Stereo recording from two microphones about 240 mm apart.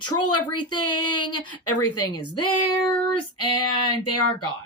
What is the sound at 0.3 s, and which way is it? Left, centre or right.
Speech, left.